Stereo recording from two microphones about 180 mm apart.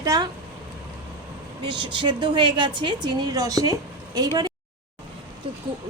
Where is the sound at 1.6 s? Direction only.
25° right (ahead or behind).